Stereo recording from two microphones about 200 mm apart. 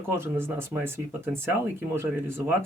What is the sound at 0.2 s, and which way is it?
Speech, 10° right (ahead or behind).